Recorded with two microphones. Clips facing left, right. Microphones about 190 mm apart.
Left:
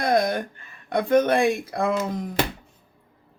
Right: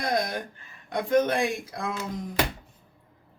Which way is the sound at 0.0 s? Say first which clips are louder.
Left 6 dB; 55° left (ahead or behind).